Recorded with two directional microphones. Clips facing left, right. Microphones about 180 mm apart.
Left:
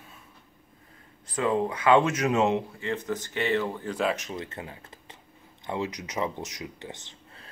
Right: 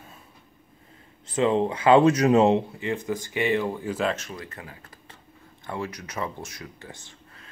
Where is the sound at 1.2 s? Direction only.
25° right (ahead or behind).